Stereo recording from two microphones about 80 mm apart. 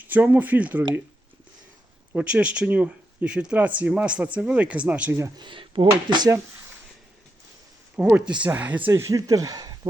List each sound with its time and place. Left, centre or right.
0.0 s speech: right
2.1 s speech: centre
5.4 s speech: right
6.1 s speech: right
8.1 s speech: centre
8.9 s speech: right